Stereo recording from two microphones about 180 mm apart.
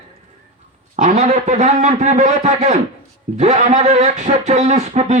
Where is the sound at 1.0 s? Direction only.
40° right (ahead or behind).